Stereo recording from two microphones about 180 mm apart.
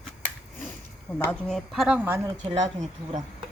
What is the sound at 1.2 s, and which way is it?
A woman's voice, 5° left (ahead or behind).